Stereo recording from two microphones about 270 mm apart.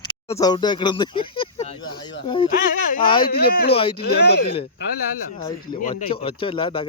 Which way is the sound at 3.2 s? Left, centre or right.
Left.